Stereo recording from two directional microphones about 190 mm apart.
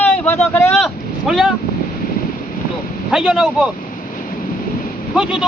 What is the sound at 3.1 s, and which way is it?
Speech, 5° right (ahead or behind).